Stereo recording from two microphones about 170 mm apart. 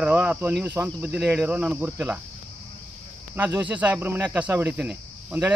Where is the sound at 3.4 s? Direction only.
10° right (ahead or behind).